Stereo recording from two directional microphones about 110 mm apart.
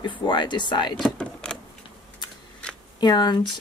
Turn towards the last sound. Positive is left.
turn(degrees=40)  # may be behind; listen again after turning